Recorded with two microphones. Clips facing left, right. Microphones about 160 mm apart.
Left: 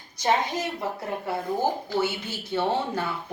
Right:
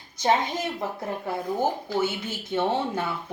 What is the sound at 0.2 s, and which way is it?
Speech, 20° right (ahead or behind).